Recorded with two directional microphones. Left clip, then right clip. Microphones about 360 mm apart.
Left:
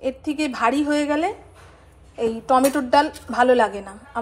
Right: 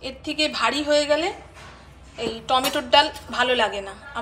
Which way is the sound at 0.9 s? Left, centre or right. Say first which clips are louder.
Right 2 dB; left.